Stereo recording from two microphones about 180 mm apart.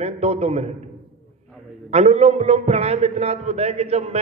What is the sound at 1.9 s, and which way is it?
A man's voice, 35° right (ahead or behind).